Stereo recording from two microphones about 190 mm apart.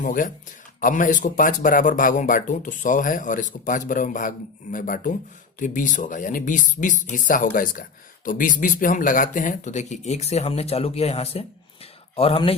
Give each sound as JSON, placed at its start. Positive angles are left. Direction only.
{"t": 0.0, "sound": "speech", "side_deg": 45}